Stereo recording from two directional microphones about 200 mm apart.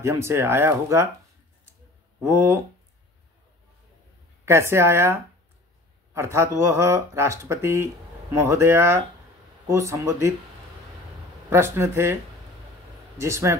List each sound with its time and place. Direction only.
0.0 s speech: 15° right (ahead or behind)
2.1 s speech: 10° right (ahead or behind)
4.5 s speech: 15° right (ahead or behind)
11.5 s speech: 10° right (ahead or behind)
13.2 s speech: 15° right (ahead or behind)